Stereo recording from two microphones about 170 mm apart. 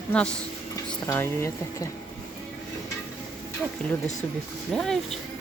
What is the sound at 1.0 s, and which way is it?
Speech, 15° left (ahead or behind).